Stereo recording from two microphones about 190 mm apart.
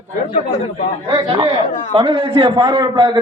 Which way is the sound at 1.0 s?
25° right (ahead or behind).